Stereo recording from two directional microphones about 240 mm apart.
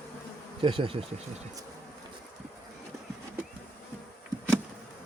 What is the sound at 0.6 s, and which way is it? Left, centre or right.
Speech, right.